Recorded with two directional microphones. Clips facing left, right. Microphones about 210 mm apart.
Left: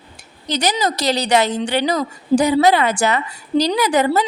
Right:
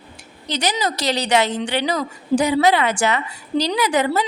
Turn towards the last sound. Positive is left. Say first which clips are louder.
# left 3 dB
turn(degrees=40)  # may be behind; listen again after turning